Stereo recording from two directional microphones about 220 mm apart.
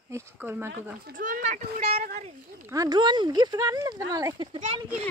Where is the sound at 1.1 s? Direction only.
40° right (ahead or behind).